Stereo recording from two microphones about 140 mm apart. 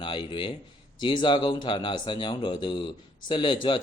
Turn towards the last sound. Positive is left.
turn(degrees=35)  # may be behind; listen again after turning